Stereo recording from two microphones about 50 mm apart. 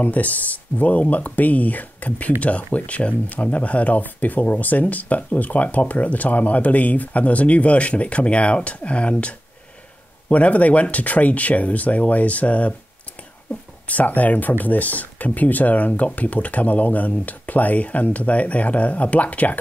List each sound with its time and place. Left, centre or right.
0.0 s speech: left
10.3 s speech: left
13.8 s speech: left